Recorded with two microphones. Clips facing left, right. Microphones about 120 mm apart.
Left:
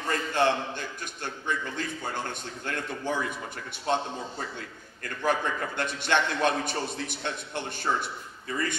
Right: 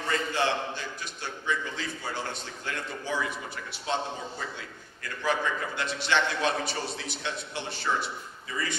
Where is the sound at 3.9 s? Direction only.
55° left (ahead or behind).